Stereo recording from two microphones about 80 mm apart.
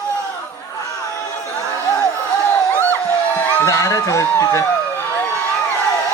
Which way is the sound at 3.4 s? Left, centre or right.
Left.